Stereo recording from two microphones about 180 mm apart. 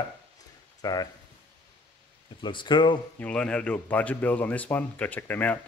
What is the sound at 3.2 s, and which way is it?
Speech, 5° left (ahead or behind).